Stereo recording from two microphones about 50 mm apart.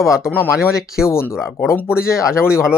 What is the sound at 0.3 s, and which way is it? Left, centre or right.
Speech, left.